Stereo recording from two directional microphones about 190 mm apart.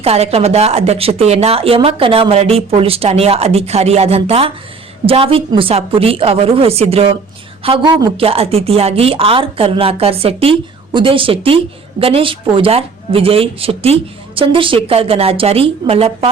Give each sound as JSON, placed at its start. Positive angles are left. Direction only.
{"t": 0.0, "sound": "a woman's voice", "side_deg": -35}